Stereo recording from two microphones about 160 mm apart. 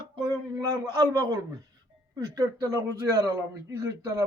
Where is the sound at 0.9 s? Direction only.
20° right (ahead or behind).